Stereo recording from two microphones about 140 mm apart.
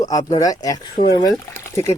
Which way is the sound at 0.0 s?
25° left (ahead or behind).